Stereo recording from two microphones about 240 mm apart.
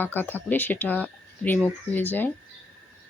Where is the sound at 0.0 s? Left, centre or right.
Centre.